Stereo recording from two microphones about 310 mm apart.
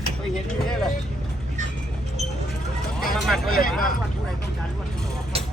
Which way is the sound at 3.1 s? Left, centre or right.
Centre.